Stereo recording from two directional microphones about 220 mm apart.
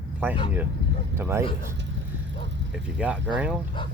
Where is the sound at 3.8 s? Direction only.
20° left (ahead or behind).